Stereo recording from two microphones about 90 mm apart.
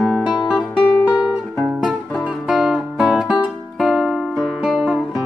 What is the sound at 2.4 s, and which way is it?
Guitar, 5° right (ahead or behind).